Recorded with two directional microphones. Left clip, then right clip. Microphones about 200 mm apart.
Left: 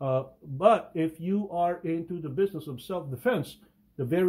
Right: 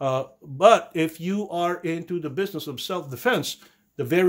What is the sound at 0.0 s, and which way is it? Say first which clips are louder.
Speech: right 4 dB; 35° right (ahead or behind).